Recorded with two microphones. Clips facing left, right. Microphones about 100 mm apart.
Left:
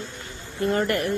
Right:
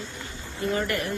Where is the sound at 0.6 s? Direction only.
50° left (ahead or behind).